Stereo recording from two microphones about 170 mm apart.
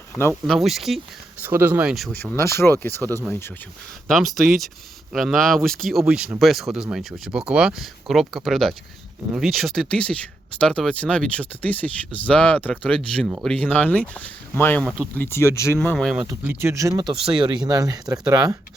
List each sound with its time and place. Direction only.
0.4 s speech: centre (ahead or behind)
1.4 s speech: 10° right (ahead or behind)
2.3 s speech: 15° left (ahead or behind)
4.1 s speech: centre (ahead or behind); by 15.7 s 15° left (ahead or behind)
15.8 s speech: 5° left (ahead or behind)
16.2 s speech: 10° right (ahead or behind)